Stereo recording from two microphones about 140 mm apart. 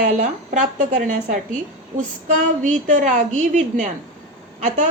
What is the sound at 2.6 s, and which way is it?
A woman's voice, 65° right (ahead or behind).